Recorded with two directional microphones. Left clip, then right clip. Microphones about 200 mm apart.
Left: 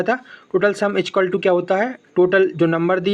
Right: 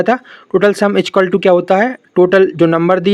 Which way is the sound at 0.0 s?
35° right (ahead or behind).